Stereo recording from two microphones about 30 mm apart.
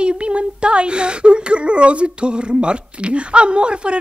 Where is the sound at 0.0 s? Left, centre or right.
Right.